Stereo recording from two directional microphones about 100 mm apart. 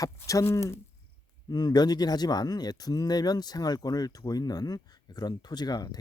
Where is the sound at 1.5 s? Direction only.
40° left (ahead or behind).